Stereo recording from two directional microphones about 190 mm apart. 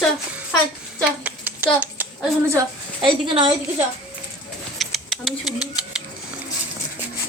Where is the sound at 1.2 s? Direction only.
10° right (ahead or behind).